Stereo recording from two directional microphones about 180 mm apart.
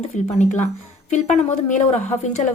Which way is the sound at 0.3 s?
40° left (ahead or behind).